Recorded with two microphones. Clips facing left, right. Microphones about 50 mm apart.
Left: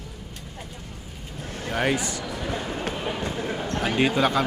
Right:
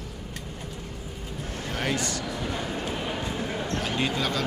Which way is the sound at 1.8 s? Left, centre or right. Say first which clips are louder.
Left 4 dB; centre.